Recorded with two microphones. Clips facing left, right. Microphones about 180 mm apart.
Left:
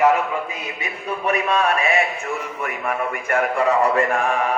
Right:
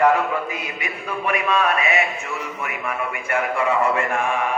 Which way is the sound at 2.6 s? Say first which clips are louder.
Left 3 dB; 40° left (ahead or behind).